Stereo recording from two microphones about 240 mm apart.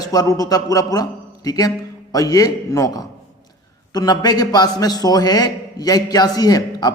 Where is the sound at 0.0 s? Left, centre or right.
Centre.